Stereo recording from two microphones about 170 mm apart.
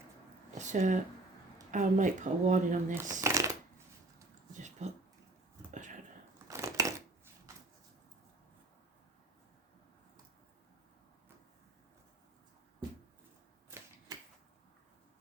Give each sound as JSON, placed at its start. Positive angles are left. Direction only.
{"t": 0.5, "sound": "a sound", "side_deg": -45}
{"t": 1.7, "sound": "speech", "side_deg": -45}
{"t": 2.9, "sound": "speech", "side_deg": -15}
{"t": 4.8, "sound": "speech", "side_deg": -40}
{"t": 6.5, "sound": "crushing", "side_deg": -15}